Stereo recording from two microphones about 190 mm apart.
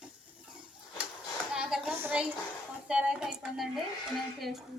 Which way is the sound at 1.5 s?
5° right (ahead or behind).